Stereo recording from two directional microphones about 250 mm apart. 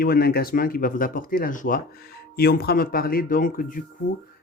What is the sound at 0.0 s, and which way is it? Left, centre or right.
Speech, left.